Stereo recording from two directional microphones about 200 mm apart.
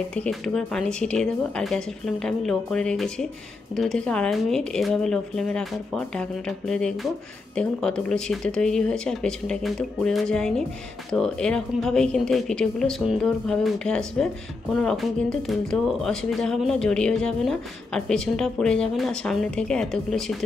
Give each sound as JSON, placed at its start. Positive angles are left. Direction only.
{"t": 0.1, "sound": "speech", "side_deg": 5}